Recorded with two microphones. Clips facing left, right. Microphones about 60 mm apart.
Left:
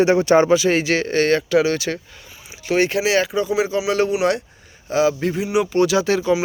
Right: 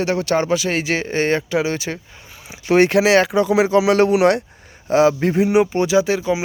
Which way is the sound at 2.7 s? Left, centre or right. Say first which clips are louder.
Right 5 dB; right.